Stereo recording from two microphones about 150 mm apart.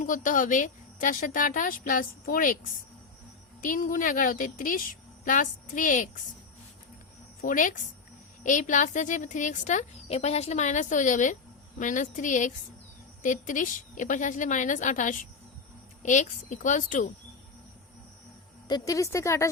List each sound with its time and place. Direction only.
0.0 s a woman's voice: 60° left (ahead or behind)
3.6 s a woman's voice: 65° left (ahead or behind)
7.4 s a woman's voice: 60° left (ahead or behind)
18.7 s a woman's voice: 20° left (ahead or behind)